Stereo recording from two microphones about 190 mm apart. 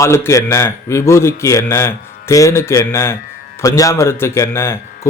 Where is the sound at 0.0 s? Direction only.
15° left (ahead or behind).